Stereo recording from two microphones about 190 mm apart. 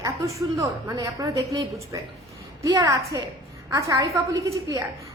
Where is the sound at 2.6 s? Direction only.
15° right (ahead or behind).